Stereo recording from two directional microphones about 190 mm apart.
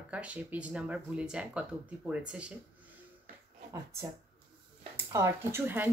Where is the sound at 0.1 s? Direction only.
5° right (ahead or behind).